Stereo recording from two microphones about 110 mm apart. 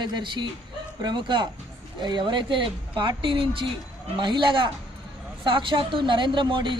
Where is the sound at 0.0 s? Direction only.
45° right (ahead or behind).